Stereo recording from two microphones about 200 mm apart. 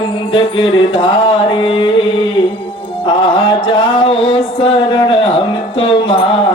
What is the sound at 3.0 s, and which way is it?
Music, 25° left (ahead or behind).